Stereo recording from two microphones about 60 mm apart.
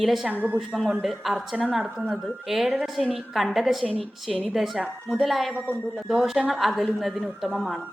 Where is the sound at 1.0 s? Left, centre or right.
Centre.